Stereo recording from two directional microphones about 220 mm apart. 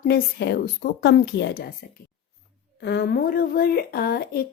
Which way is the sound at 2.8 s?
50° left (ahead or behind).